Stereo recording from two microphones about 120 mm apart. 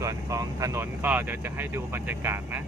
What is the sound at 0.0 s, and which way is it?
Speech, 30° right (ahead or behind).